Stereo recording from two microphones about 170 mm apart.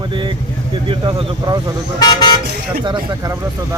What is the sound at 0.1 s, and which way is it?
Vehicle, 30° right (ahead or behind).